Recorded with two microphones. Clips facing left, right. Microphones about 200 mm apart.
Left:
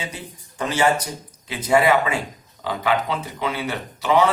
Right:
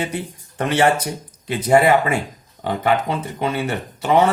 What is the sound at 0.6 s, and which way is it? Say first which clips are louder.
Speech: right 3 dB; 60° right (ahead or behind).